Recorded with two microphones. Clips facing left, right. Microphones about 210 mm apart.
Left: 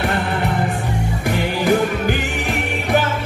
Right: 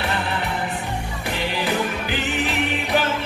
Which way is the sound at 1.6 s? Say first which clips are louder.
Left 9 dB; 45° left (ahead or behind).